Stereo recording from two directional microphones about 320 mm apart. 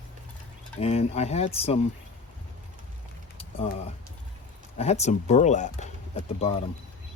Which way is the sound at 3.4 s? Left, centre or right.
Centre.